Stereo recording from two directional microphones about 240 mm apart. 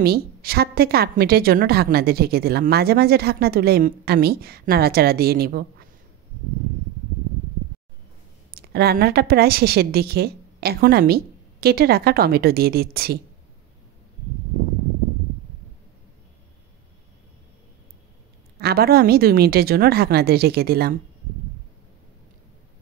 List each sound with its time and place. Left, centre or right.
0.0 s a woman's voice: right
8.5 s a woman's voice: right
18.6 s a woman's voice: right